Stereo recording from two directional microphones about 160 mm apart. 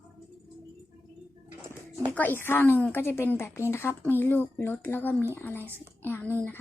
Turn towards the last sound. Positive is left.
turn(degrees=10)  # may be behind; listen again after turning